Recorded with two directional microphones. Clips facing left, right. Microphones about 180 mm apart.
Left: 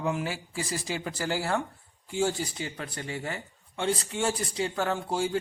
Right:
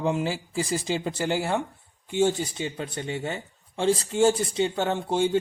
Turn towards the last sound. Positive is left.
turn(degrees=-25)  # may be behind; listen again after turning